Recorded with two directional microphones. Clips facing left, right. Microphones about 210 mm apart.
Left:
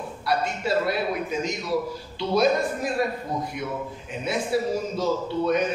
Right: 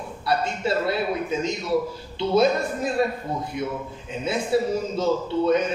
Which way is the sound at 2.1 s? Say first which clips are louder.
Right 2 dB; 25° right (ahead or behind).